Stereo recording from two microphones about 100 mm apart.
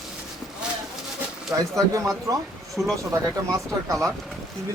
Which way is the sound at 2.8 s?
20° right (ahead or behind).